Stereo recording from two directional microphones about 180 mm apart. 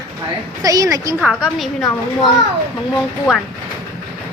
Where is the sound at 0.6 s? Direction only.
20° right (ahead or behind).